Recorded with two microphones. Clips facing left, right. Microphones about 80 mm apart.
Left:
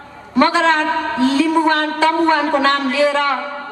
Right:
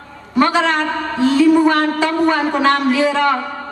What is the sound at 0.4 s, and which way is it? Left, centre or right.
A man's voice, centre.